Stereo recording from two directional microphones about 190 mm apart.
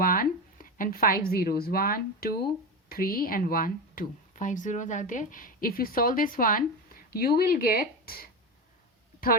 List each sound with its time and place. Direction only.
0.0 s a woman's voice: 50° left (ahead or behind)